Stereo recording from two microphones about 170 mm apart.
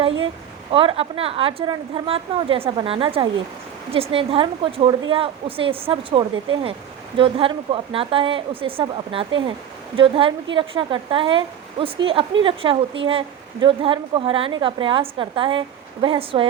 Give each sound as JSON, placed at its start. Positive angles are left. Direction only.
{"t": 0.7, "sound": "a woman's voice", "side_deg": -30}